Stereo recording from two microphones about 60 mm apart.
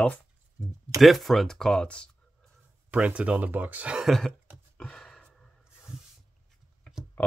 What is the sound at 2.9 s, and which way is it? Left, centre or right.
Speech, right.